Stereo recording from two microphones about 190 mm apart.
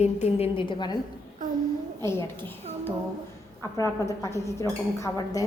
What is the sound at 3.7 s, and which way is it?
A woman's voice, 15° left (ahead or behind).